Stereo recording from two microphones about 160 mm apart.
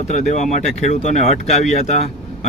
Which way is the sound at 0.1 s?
50° left (ahead or behind).